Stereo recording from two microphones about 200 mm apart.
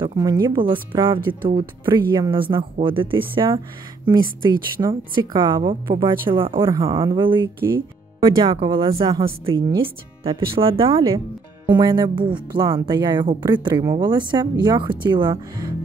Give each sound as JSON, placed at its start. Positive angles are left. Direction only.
{"t": 0.0, "sound": "speech", "side_deg": -20}